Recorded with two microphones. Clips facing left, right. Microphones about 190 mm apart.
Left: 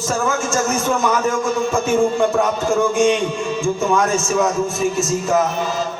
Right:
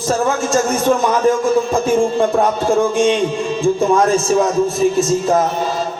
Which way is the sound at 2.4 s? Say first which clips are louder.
Right 3 dB; 35° right (ahead or behind).